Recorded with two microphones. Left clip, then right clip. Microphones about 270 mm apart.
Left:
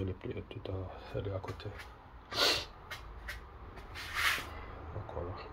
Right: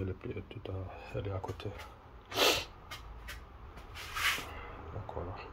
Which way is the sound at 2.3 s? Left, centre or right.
Centre.